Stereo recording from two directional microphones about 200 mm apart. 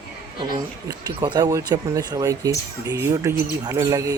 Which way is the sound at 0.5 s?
20° right (ahead or behind).